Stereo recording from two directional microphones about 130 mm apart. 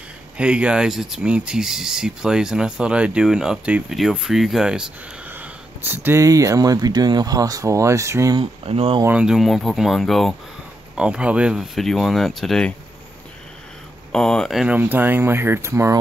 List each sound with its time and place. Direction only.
0.4 s speech: 10° right (ahead or behind); by 8.4 s 25° right (ahead or behind)
8.4 s speech: 45° right (ahead or behind)
9.0 s speech: 10° right (ahead or behind)
14.1 s speech: 5° left (ahead or behind)
14.8 s speech: 15° right (ahead or behind)